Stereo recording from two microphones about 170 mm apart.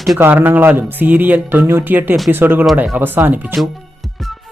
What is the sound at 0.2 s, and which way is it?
Speech, 10° right (ahead or behind).